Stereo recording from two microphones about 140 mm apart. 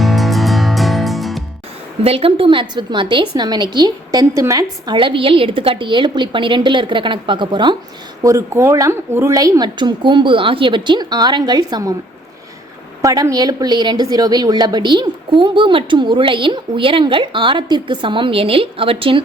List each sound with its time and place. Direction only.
0.0 s music: centre (ahead or behind)
2.0 s a woman's voice: 40° right (ahead or behind)
8.2 s speech: 25° right (ahead or behind)
13.0 s a woman's voice: 25° right (ahead or behind); by 19.2 s 40° right (ahead or behind)